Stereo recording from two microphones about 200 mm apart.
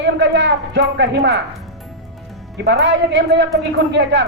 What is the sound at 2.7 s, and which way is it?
Speech, 60° right (ahead or behind).